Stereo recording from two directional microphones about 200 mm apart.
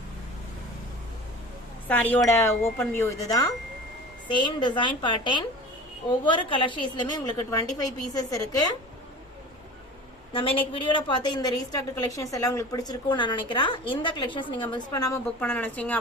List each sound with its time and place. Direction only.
1.9 s a woman's voice: 10° left (ahead or behind)
10.3 s a woman's voice: 25° left (ahead or behind); by 16.0 s 10° left (ahead or behind)